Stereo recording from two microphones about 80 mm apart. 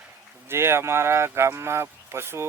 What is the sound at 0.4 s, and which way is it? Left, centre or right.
Speech, right.